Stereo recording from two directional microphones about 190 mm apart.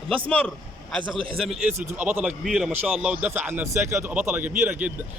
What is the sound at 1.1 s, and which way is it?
Speech, 25° right (ahead or behind).